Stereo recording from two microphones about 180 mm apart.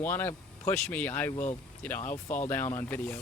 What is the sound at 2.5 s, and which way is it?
Speech, 10° left (ahead or behind).